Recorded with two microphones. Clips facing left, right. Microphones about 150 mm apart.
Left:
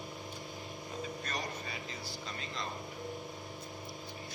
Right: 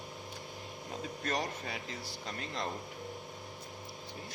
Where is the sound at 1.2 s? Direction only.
85° right; by 2.6 s 65° right (ahead or behind).